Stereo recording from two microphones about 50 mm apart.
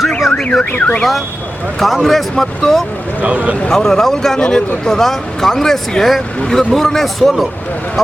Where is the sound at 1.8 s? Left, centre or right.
Centre.